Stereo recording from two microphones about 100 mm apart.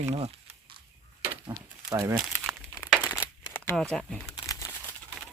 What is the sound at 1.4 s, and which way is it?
Crumpling, 35° right (ahead or behind).